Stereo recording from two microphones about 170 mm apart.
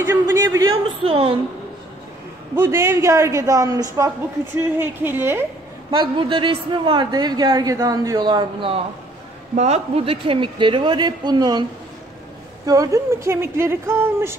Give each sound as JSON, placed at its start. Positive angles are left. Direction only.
{"t": 0.0, "sound": "a man's voice", "side_deg": -15}
{"t": 1.0, "sound": "a woman's voice", "side_deg": -35}
{"t": 2.5, "sound": "a woman's voice", "side_deg": -15}
{"t": 5.9, "sound": "a woman's voice", "side_deg": -30}
{"t": 12.6, "sound": "speech", "side_deg": -20}